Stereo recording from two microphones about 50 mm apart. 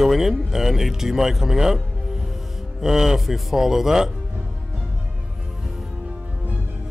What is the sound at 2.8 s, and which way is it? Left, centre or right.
Speech, centre.